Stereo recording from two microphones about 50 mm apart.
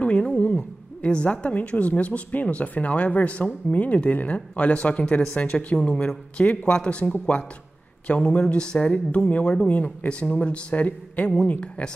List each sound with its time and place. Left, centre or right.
0.0 s a woman's voice: left
8.9 s speech: left
9.4 s a woman's voice: centre